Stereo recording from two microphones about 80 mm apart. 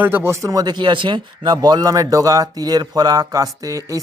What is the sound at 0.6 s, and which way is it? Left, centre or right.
Speech, right.